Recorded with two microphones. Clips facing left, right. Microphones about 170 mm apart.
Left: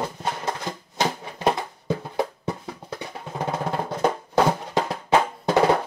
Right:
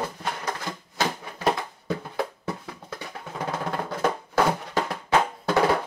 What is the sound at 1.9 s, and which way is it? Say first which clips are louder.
Music: left 3 dB; 20° left (ahead or behind).